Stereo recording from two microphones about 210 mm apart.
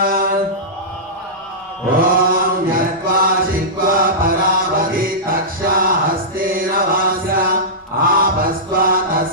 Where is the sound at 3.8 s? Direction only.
45° right (ahead or behind).